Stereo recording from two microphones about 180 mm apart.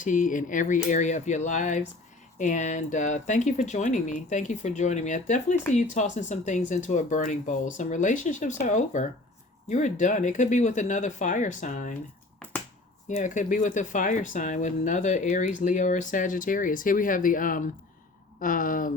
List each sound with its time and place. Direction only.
0.0 s speech: 45° left (ahead or behind)
13.1 s speech: 45° left (ahead or behind)